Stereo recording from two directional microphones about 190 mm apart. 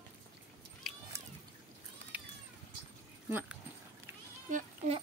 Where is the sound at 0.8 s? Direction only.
Centre (ahead or behind).